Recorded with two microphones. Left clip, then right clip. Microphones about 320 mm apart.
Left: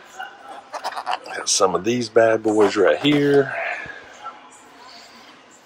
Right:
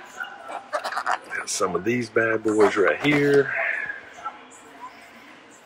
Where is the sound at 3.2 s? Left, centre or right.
Left.